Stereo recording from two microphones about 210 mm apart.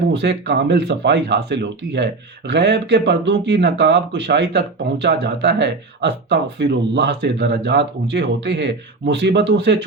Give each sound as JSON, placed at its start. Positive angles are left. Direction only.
{"t": 0.1, "sound": "speech", "side_deg": -55}